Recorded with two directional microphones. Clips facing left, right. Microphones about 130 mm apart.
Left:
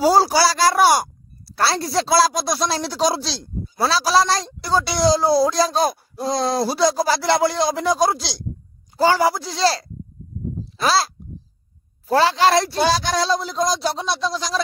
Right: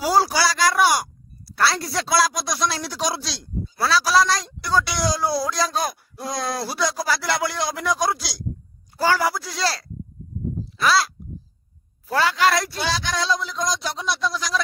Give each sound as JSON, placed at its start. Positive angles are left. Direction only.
{"t": 0.0, "sound": "speech", "side_deg": 30}
{"t": 12.1, "sound": "speech", "side_deg": 30}